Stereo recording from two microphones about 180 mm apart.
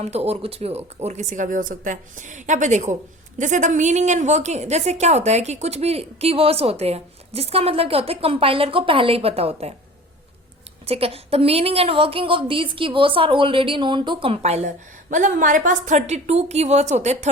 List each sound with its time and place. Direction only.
0.0 s a woman's voice: 35° right (ahead or behind)
10.8 s a woman's voice: 35° right (ahead or behind)